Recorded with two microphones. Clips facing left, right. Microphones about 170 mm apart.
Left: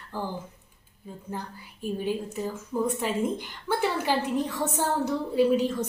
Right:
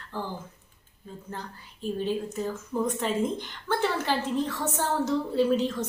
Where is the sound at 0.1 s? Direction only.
15° left (ahead or behind).